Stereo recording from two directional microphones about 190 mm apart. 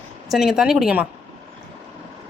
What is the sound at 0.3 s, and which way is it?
Speech, centre (ahead or behind).